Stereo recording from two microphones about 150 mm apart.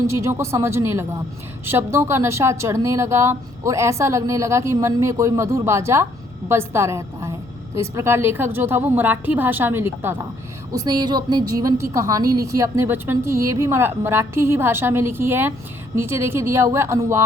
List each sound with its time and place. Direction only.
0.1 s a woman's voice: 20° right (ahead or behind)
10.7 s a woman's voice: 25° right (ahead or behind)